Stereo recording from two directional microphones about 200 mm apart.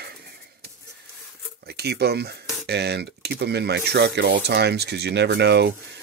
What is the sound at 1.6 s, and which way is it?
Speech, 55° right (ahead or behind).